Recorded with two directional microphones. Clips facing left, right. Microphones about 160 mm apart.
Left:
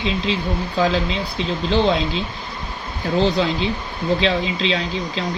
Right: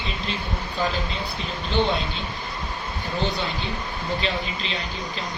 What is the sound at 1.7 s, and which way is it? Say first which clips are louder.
Speech: left 5 dB; 90° left.